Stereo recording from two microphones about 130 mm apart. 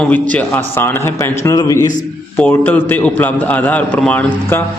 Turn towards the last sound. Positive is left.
turn(degrees=15)  # may be behind; listen again after turning